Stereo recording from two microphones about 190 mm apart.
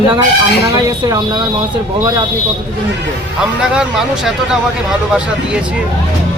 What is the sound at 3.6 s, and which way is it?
Speech, 5° right (ahead or behind).